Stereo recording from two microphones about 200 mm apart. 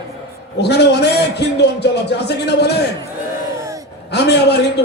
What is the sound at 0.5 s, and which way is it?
A man's voice, 55° left (ahead or behind).